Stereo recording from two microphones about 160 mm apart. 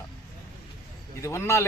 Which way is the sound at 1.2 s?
15° left (ahead or behind).